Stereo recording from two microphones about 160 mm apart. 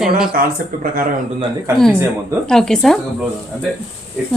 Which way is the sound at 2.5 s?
5° left (ahead or behind).